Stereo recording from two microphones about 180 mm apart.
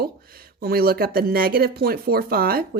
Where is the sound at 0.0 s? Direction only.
55° right (ahead or behind).